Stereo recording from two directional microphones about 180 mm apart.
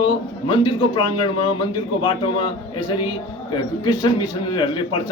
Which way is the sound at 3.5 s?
25° left (ahead or behind).